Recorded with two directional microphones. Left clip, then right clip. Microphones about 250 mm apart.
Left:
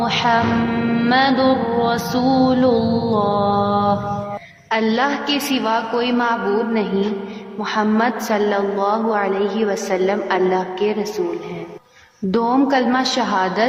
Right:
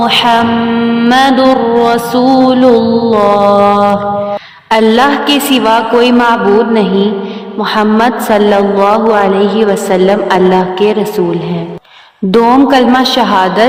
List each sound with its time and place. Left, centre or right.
0.0 s mantra: right
12.3 s mantra: right